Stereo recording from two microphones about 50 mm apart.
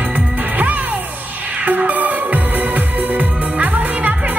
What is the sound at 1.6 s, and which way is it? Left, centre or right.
Music, right.